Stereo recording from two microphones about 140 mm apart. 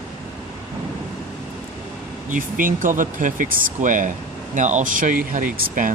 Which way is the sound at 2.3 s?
75° right (ahead or behind).